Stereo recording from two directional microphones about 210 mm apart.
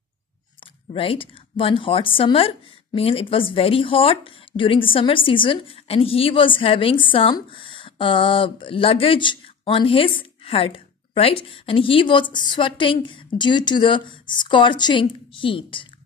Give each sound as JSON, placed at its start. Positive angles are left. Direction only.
{"t": 0.9, "sound": "speech", "side_deg": 25}